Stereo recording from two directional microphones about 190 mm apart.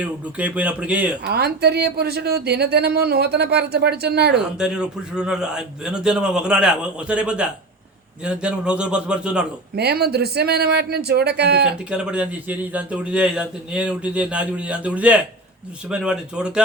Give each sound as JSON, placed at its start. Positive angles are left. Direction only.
{"t": 0.0, "sound": "speech", "side_deg": -5}
{"t": 1.2, "sound": "speech", "side_deg": -55}
{"t": 4.5, "sound": "a man's voice", "side_deg": -5}
{"t": 9.7, "sound": "speech", "side_deg": -60}
{"t": 11.9, "sound": "a man's voice", "side_deg": -5}